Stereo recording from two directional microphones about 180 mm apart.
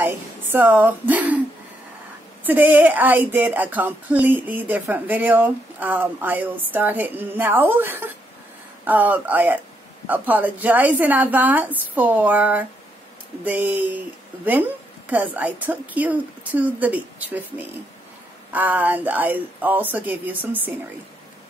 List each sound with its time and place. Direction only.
0.0 s speech: 10° right (ahead or behind)
2.4 s speech: 10° right (ahead or behind)